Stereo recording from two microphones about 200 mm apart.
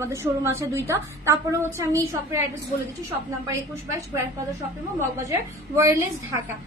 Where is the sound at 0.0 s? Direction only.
15° right (ahead or behind).